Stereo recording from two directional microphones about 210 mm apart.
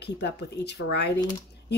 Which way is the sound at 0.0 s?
55° left (ahead or behind).